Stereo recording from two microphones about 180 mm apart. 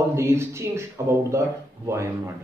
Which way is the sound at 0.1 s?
15° right (ahead or behind).